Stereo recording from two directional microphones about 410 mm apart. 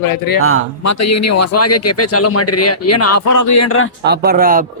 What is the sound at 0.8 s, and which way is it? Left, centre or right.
A man's voice, left.